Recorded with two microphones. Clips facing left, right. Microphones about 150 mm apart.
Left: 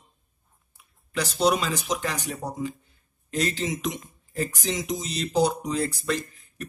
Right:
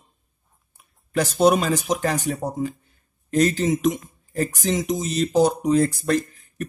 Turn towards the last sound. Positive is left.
turn(degrees=-45)  # may be behind; listen again after turning